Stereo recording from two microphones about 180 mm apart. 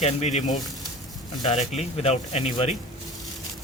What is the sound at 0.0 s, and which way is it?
Speech, 40° left (ahead or behind).